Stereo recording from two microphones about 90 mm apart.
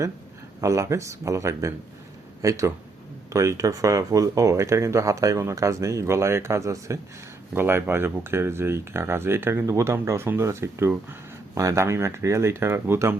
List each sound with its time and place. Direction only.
0.6 s speech: 35° right (ahead or behind)